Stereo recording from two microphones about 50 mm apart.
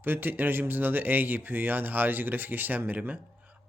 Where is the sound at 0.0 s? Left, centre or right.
Right.